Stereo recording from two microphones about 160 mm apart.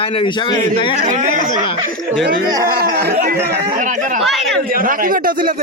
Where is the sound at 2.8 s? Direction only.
75° right (ahead or behind).